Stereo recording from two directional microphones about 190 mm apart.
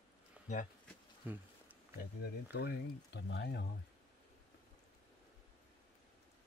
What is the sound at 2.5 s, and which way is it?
Speech, 65° left (ahead or behind).